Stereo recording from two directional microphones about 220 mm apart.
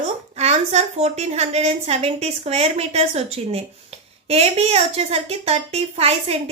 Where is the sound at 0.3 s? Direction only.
30° right (ahead or behind).